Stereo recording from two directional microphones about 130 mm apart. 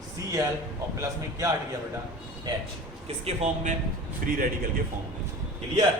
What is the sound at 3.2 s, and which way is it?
Speech, 55° right (ahead or behind).